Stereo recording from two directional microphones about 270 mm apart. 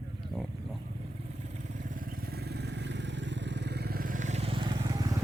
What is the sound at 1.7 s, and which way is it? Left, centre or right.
Vehicle, right.